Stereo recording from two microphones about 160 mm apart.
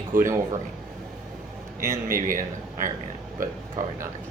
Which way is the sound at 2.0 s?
60° right (ahead or behind).